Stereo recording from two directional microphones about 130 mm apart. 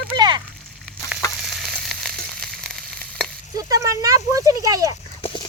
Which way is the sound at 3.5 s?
25° right (ahead or behind).